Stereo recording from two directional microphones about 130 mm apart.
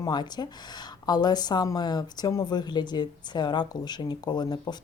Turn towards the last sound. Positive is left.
turn(degrees=35)  # may be behind; listen again after turning